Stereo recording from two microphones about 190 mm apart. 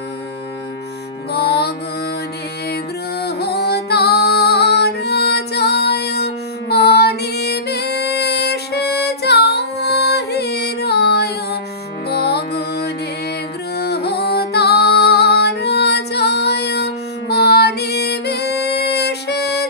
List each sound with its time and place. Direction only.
1.3 s music: 55° left (ahead or behind)
2.7 s music: 55° left (ahead or behind)